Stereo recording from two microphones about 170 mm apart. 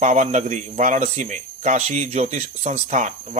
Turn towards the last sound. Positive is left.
turn(degrees=-45)  # may be behind; listen again after turning